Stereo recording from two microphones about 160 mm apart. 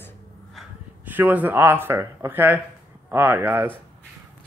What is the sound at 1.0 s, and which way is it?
Speech, 10° right (ahead or behind).